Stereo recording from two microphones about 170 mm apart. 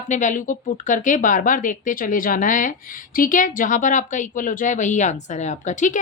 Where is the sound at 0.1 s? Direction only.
45° left (ahead or behind).